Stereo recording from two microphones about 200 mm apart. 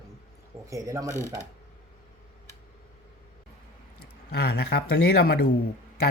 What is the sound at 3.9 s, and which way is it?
Speech, 50° left (ahead or behind).